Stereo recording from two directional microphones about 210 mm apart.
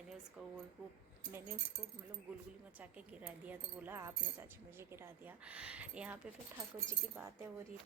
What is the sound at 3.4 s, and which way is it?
Speech, 10° right (ahead or behind).